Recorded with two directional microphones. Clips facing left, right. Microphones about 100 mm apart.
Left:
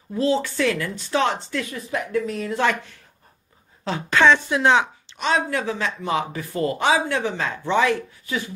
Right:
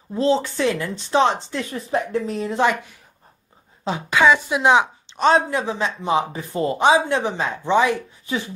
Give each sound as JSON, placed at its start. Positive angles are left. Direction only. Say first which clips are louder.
{"t": 0.1, "sound": "a woman's voice", "louder": "right 2 dB", "side_deg": -25}
{"t": 5.1, "sound": "speech", "louder": "right 6 dB", "side_deg": -35}
{"t": 5.5, "sound": "speech", "louder": "right 2 dB", "side_deg": -20}